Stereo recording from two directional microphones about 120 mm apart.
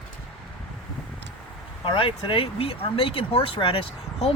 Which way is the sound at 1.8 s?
50° left (ahead or behind).